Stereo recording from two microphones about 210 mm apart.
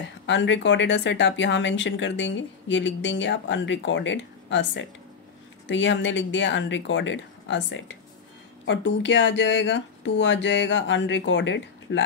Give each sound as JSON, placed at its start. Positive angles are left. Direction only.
{"t": 0.3, "sound": "speech", "side_deg": 60}